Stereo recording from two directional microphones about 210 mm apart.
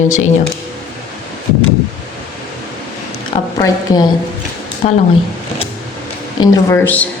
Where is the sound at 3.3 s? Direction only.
25° left (ahead or behind).